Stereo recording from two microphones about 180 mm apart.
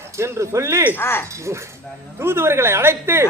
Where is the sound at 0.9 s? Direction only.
15° left (ahead or behind).